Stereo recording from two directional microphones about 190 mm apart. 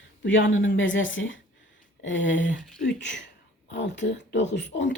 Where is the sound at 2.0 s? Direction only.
75° left (ahead or behind).